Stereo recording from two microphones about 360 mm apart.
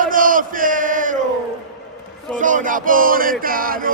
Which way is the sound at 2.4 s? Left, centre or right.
Right.